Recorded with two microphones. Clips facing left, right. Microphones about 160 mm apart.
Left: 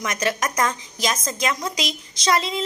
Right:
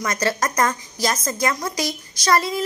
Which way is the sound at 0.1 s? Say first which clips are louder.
Right 2 dB; 15° left (ahead or behind).